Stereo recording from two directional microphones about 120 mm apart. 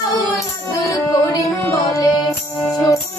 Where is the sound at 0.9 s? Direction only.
30° left (ahead or behind).